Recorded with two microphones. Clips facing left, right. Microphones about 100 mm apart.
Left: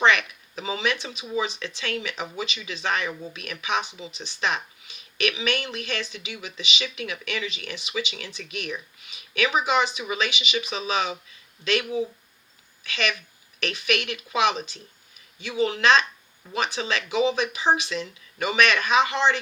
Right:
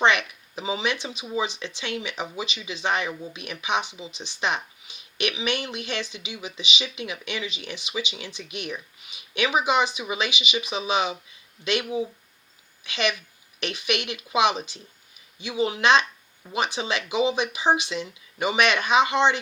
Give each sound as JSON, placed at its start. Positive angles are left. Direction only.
{"t": 0.0, "sound": "a sound", "side_deg": -25}
{"t": 1.5, "sound": "speech", "side_deg": -20}
{"t": 15.8, "sound": "speech", "side_deg": -20}
{"t": 16.5, "sound": "speech", "side_deg": -10}